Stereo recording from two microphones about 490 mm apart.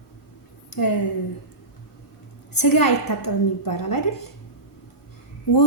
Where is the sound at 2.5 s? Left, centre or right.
Left.